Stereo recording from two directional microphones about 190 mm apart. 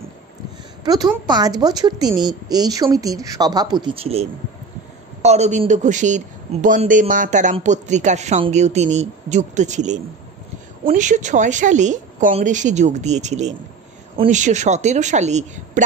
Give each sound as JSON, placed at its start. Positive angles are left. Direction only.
{"t": 0.8, "sound": "a woman's voice", "side_deg": -20}